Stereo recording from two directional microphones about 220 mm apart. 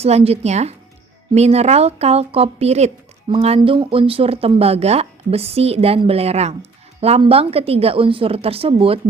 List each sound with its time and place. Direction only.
0.0 s speech: 30° right (ahead or behind)